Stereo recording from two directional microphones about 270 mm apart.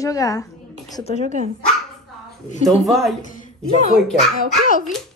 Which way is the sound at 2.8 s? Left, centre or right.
Centre.